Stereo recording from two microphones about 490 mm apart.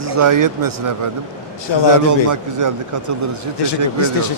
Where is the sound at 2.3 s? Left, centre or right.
Right.